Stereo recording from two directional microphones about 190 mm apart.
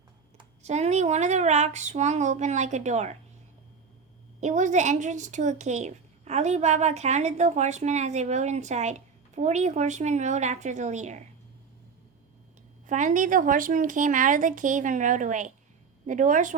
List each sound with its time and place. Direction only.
0.3 s a woman's voice: 35° right (ahead or behind)
4.4 s a woman's voice: 40° right (ahead or behind)
12.9 s a woman's voice: 40° right (ahead or behind)